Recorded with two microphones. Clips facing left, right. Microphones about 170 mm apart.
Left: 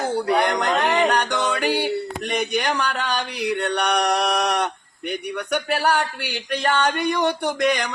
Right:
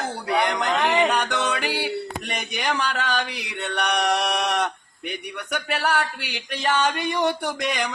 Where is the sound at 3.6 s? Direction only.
Centre (ahead or behind).